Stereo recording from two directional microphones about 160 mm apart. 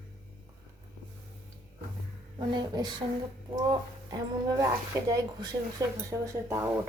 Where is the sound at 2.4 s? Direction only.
25° right (ahead or behind).